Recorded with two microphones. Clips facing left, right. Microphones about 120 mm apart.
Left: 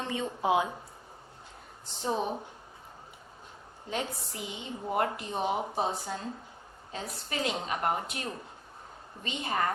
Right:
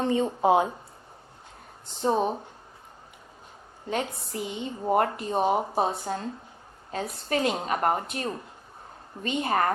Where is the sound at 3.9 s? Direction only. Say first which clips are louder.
Right 5 dB; 50° right (ahead or behind).